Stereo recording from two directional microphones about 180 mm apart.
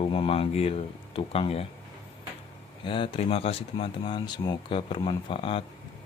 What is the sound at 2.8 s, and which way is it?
Speech, 30° left (ahead or behind).